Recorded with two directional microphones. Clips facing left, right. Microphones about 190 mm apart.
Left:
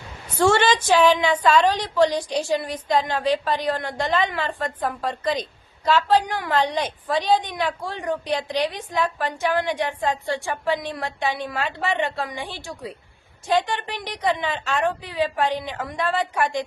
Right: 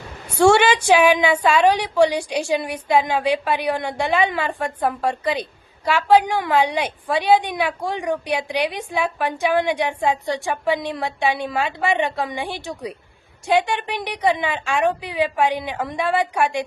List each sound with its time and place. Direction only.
0.3 s a woman's voice: 10° right (ahead or behind)